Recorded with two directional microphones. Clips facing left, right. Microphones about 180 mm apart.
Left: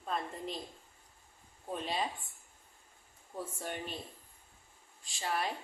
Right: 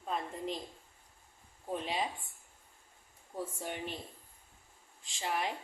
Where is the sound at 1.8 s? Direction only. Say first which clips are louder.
Left 1 dB; 15° right (ahead or behind).